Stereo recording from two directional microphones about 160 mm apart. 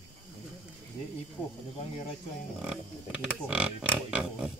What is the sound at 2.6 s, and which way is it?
Speech, 5° right (ahead or behind).